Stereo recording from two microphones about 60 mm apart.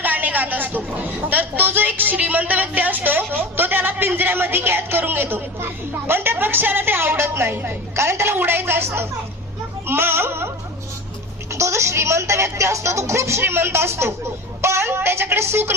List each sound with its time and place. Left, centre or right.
0.0 s a sound: right
1.3 s a woman's voice: right
11.5 s a woman's voice: right